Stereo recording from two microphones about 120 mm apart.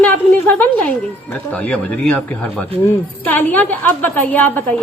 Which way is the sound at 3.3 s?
15° left (ahead or behind).